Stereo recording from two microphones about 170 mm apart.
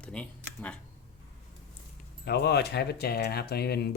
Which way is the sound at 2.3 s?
75° left (ahead or behind).